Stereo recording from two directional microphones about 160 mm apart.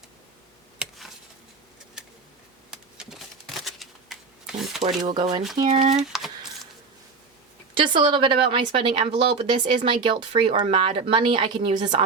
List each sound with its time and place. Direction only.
0.8 s a sound: centre (ahead or behind)
2.6 s shuffling cards: 5° right (ahead or behind)
5.0 s speech: 30° right (ahead or behind)
5.6 s speech: 45° right (ahead or behind)
6.0 s a sound: centre (ahead or behind)
7.8 s a woman's voice: 30° right (ahead or behind)